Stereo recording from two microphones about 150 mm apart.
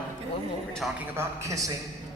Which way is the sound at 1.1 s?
20° right (ahead or behind).